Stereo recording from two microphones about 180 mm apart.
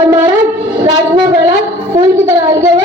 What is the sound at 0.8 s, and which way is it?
Speech, 25° right (ahead or behind).